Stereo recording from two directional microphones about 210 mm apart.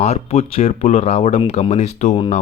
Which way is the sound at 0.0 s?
30° left (ahead or behind).